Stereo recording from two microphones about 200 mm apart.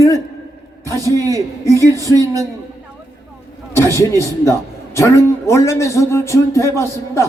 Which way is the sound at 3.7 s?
15° left (ahead or behind).